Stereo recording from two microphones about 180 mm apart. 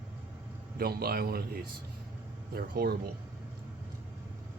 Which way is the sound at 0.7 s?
60° right (ahead or behind).